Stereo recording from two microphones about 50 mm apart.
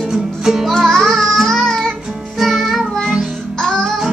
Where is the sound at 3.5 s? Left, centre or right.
Centre.